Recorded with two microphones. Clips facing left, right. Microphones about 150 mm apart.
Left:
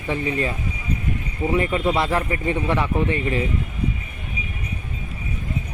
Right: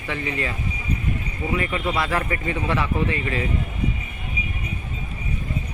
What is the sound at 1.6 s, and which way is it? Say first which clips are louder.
A man's voice: left 4 dB; 25° left (ahead or behind).